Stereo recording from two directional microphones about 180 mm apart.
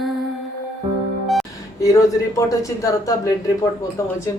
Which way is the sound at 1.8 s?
20° left (ahead or behind).